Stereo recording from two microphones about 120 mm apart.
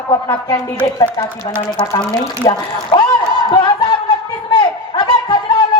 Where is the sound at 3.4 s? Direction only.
45° left (ahead or behind).